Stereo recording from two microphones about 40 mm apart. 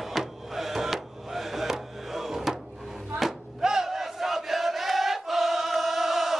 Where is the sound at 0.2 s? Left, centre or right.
Centre.